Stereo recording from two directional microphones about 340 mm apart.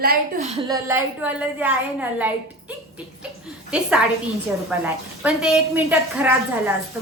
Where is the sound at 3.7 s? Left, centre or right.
Centre.